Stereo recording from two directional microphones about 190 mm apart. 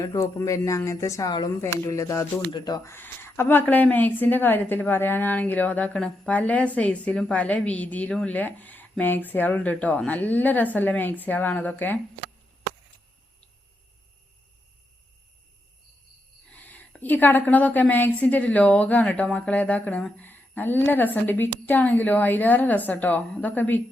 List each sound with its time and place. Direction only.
0.0 s speech: 15° left (ahead or behind)
16.5 s speech: 10° left (ahead or behind)